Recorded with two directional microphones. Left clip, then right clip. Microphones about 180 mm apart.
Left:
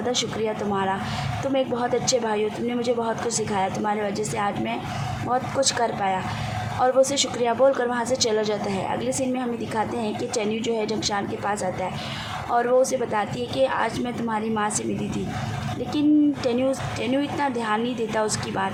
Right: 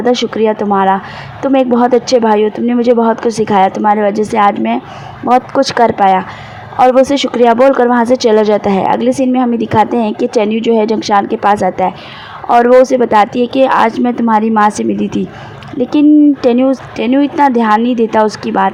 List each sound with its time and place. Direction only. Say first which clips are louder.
0.0 s speech: right 14 dB; 35° right (ahead or behind)